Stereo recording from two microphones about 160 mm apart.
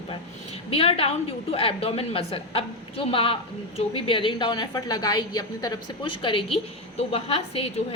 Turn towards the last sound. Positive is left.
turn(degrees=40)  # may be behind; listen again after turning